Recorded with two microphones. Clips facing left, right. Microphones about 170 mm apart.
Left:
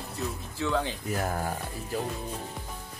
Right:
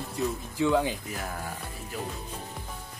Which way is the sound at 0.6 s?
15° right (ahead or behind).